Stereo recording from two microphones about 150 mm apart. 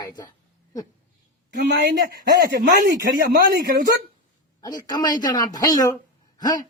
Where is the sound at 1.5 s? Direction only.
80° right.